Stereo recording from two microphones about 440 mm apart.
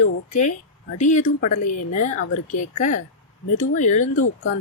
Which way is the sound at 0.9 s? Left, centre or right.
Centre.